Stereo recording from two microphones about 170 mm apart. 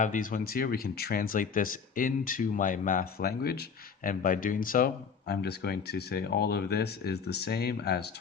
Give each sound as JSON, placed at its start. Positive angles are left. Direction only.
{"t": 0.0, "sound": "speech", "side_deg": 50}